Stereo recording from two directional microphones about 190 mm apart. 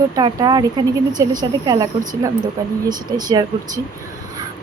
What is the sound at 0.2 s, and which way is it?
A woman's voice, 25° right (ahead or behind).